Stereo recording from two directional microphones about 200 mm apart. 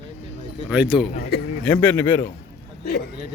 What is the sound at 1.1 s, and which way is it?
Speech, 50° left (ahead or behind).